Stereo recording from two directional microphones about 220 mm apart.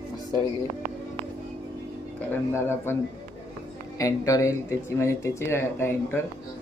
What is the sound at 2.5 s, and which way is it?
Speech, 10° left (ahead or behind).